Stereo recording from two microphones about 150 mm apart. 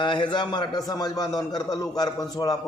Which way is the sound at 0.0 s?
30° left (ahead or behind).